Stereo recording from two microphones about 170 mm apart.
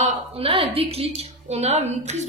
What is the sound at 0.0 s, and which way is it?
A woman's voice, 35° right (ahead or behind).